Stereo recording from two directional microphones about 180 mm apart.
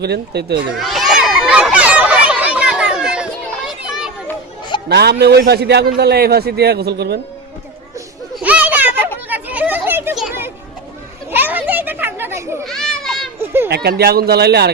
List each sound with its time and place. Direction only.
0.0 s speech: 65° right (ahead or behind)
0.8 s a sound: centre (ahead or behind)
3.7 s children playing: centre (ahead or behind)
4.9 s a man's voice: 65° right (ahead or behind)
8.4 s a sound: 10° right (ahead or behind)
9.3 s children playing: 10° right (ahead or behind)
12.6 s children playing: 5° left (ahead or behind)
13.4 s a sound: 10° right (ahead or behind)
13.7 s a man's voice: 65° right (ahead or behind)